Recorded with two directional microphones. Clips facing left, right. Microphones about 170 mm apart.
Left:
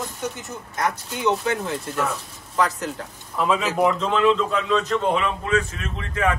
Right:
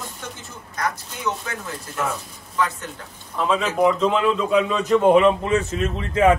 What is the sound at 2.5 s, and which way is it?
Speech, 35° left (ahead or behind).